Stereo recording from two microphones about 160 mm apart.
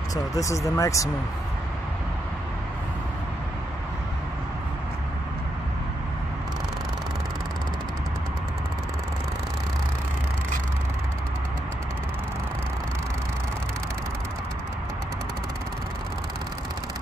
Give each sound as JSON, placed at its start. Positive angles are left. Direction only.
{"t": 0.1, "sound": "speech", "side_deg": 20}